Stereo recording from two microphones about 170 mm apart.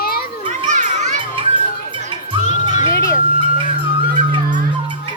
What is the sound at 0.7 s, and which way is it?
Children playing, 45° right (ahead or behind).